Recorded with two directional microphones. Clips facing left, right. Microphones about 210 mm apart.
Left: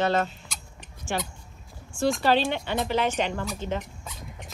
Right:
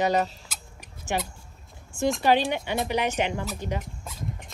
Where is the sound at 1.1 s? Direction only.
15° right (ahead or behind).